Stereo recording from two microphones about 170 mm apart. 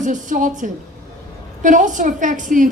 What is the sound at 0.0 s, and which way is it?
A woman's voice, 50° right (ahead or behind).